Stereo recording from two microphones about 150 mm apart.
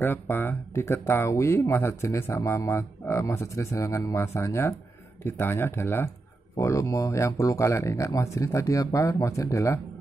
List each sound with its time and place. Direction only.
0.0 s speech: 15° left (ahead or behind)